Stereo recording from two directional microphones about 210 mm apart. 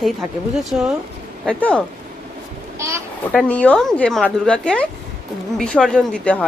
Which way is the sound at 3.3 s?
5° left (ahead or behind).